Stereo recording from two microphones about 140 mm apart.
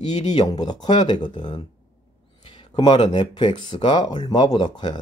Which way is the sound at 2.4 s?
35° left (ahead or behind).